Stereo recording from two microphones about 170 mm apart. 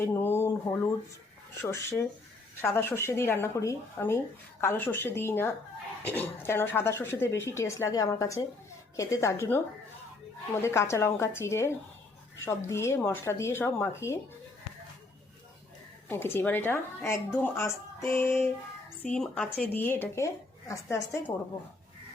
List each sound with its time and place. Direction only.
0.0 s speech: 10° left (ahead or behind)
16.0 s speech: 15° left (ahead or behind)